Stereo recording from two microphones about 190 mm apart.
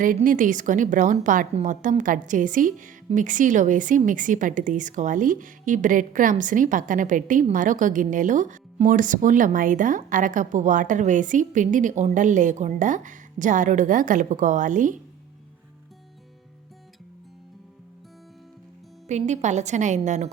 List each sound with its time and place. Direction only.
0.0 s a woman's voice: 45° right (ahead or behind)
19.0 s a woman's voice: 40° right (ahead or behind)